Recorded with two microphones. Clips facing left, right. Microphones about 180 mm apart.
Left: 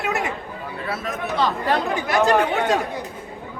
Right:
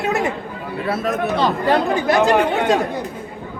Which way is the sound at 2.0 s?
25° right (ahead or behind).